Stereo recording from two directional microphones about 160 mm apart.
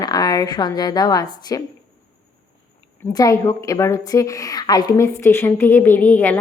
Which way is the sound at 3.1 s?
20° left (ahead or behind).